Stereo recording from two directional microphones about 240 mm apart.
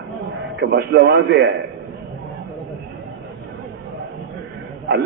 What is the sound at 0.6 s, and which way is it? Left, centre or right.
Speech, right.